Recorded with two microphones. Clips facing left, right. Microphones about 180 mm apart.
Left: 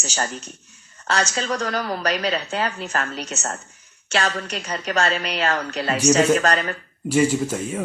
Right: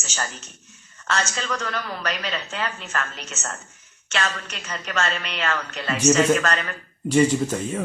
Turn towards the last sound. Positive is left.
turn(degrees=10)  # may be behind; listen again after turning